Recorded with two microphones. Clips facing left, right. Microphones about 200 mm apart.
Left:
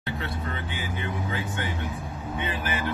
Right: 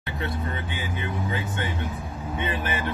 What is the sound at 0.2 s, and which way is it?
Speech, 20° right (ahead or behind).